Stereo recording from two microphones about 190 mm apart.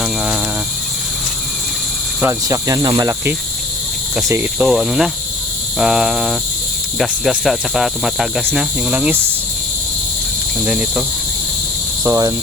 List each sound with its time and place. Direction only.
2.2 s cricket: 15° right (ahead or behind)
10.7 s cricket: 5° right (ahead or behind)
12.0 s cricket: 15° right (ahead or behind)